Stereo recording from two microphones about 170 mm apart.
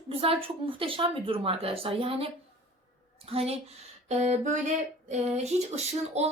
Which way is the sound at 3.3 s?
35° right (ahead or behind).